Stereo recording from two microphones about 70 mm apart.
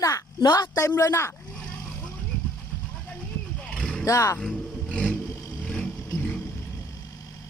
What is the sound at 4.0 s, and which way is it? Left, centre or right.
Speech, left.